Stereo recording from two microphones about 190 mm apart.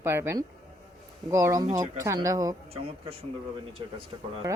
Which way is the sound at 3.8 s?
25° right (ahead or behind).